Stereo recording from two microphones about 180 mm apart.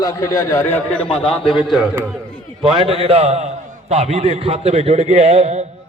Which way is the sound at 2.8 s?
30° right (ahead or behind).